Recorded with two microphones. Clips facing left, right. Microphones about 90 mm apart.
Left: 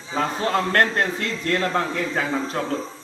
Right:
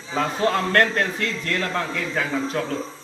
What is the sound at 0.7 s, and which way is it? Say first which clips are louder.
A man's voice: even; 30° left (ahead or behind).